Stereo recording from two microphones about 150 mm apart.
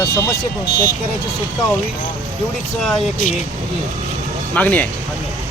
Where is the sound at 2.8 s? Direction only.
5° left (ahead or behind).